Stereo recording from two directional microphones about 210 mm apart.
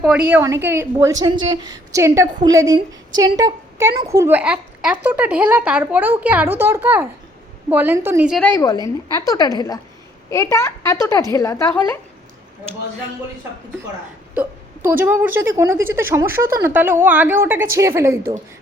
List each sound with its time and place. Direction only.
0.0 s a woman's voice: 5° right (ahead or behind)
8.4 s a woman's voice: 10° left (ahead or behind)
14.3 s a woman's voice: 10° right (ahead or behind)